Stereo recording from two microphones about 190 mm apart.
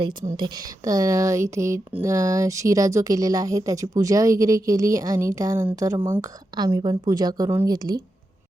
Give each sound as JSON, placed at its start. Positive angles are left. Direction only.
{"t": 0.3, "sound": "speech", "side_deg": -20}